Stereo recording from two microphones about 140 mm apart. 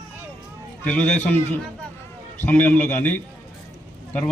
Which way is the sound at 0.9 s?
15° left (ahead or behind).